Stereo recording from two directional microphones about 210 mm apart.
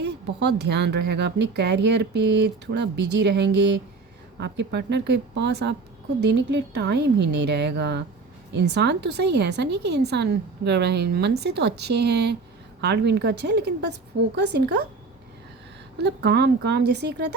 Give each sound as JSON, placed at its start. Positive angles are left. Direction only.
{"t": 0.0, "sound": "a woman's voice", "side_deg": -55}
{"t": 16.0, "sound": "a woman's voice", "side_deg": -50}